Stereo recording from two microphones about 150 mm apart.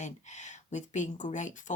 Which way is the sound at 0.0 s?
55° left (ahead or behind).